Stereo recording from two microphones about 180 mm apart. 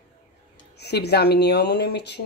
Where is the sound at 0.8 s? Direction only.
65° left (ahead or behind).